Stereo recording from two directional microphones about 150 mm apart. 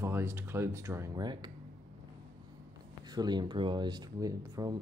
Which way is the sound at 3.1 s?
30° right (ahead or behind).